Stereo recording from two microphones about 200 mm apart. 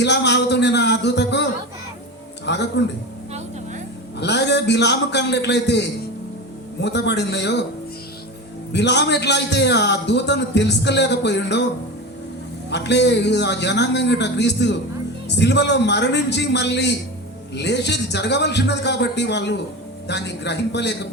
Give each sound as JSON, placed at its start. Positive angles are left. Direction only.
{"t": 0.0, "sound": "a sound", "side_deg": 60}
{"t": 2.5, "sound": "speech", "side_deg": 60}
{"t": 4.2, "sound": "a man's voice", "side_deg": 60}
{"t": 6.8, "sound": "a man's voice", "side_deg": 60}
{"t": 8.7, "sound": "a man's voice", "side_deg": 60}
{"t": 12.7, "sound": "a man's voice", "side_deg": 60}